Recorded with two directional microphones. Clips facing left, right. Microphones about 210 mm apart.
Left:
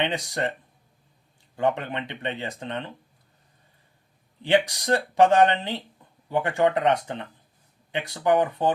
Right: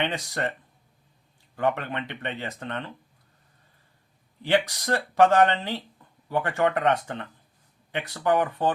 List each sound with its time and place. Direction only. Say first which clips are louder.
0.0 s speech: left 2 dB; 15° left (ahead or behind)
1.5 s speech: left 1 dB; 15° left (ahead or behind)
4.4 s speech: left 2 dB; 15° left (ahead or behind)